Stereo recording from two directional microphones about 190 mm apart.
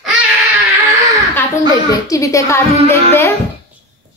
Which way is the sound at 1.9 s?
15° left (ahead or behind).